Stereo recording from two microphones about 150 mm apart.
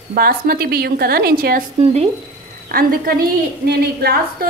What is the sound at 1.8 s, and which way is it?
Speech, 45° right (ahead or behind).